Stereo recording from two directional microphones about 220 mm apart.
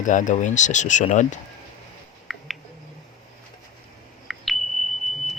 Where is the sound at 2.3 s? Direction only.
Centre (ahead or behind).